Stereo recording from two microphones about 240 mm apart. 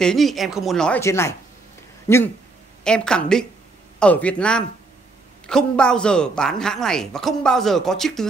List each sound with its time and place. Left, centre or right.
0.0 s a woman's voice: centre